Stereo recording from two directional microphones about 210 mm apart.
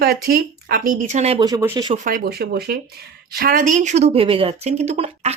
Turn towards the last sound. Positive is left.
turn(degrees=-30)  # may be behind; listen again after turning